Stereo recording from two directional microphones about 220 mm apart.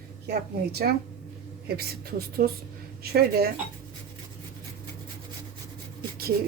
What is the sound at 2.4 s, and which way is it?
A woman's voice, 50° right (ahead or behind).